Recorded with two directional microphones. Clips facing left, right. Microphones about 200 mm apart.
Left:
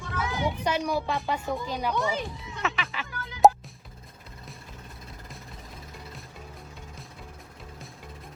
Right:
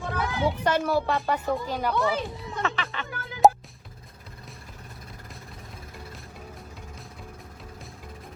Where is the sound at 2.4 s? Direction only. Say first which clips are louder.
Right 2 dB; centre (ahead or behind).